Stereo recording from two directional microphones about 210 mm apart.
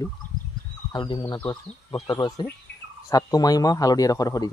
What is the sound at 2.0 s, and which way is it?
Speech, 20° left (ahead or behind).